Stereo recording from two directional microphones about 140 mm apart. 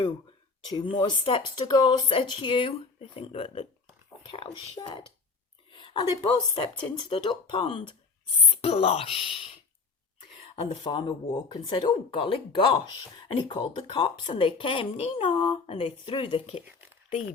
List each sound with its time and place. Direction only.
0.7 s speech: 35° left (ahead or behind)